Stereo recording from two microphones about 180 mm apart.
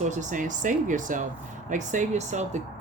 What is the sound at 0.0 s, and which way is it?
Speech, 40° right (ahead or behind).